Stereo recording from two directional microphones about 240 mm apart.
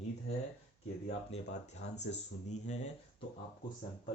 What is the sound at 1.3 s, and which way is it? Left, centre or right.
Speech, left.